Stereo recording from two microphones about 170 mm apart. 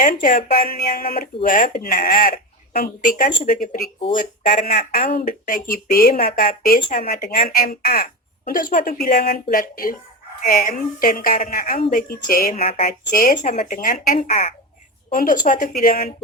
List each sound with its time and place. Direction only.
0.0 s speech: 55° left (ahead or behind)
12.5 s speech: 40° left (ahead or behind)
12.8 s speech: 55° left (ahead or behind)
13.7 s speech: 55° left (ahead or behind)
14.2 s speech: 40° left (ahead or behind)
15.1 s speech: 55° left (ahead or behind)